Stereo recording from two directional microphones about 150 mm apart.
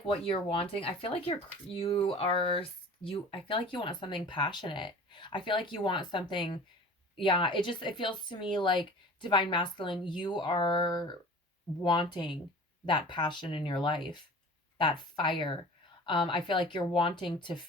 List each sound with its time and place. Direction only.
0.5 s speech: 40° left (ahead or behind)